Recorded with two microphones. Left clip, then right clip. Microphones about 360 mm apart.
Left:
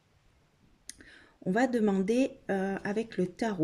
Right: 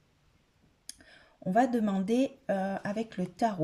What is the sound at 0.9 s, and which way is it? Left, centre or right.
Speech, right.